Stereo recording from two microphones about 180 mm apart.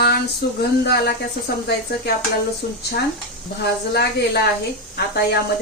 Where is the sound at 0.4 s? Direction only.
65° left (ahead or behind).